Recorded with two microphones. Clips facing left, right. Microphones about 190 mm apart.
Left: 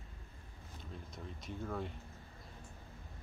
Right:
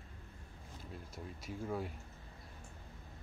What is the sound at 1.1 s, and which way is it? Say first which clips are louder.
Speech: right 1 dB; 5° right (ahead or behind).